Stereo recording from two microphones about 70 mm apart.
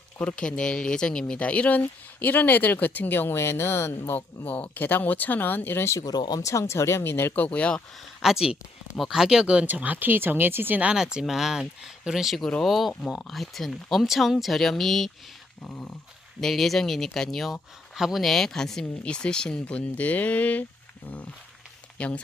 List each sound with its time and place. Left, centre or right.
0.2 s speech: centre; by 4.2 s left
4.4 s speech: left
6.1 s speech: left
6.4 s speech: left
7.4 s speech: centre
8.2 s speech: centre
9.6 s speech: right
10.8 s speech: centre
15.6 s speech: centre
16.4 s speech: centre; by 20.7 s left
21.9 s speech: centre